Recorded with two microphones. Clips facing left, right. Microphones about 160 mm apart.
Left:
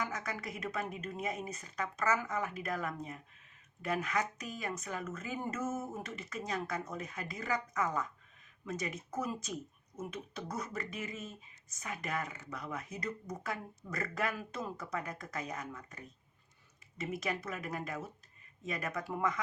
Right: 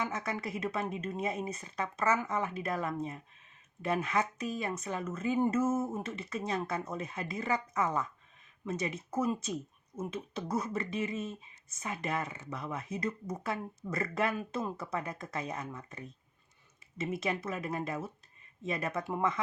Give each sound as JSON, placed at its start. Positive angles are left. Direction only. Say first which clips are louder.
{"t": 0.0, "sound": "speech", "louder": "right 4 dB", "side_deg": -25}